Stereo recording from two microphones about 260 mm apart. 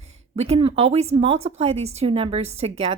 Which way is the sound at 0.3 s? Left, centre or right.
Right.